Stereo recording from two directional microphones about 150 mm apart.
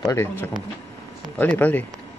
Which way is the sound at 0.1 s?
15° left (ahead or behind).